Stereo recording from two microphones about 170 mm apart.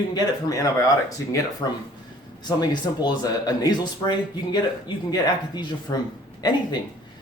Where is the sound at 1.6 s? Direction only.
25° left (ahead or behind).